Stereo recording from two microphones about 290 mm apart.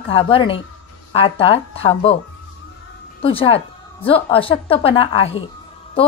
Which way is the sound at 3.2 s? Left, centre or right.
Centre.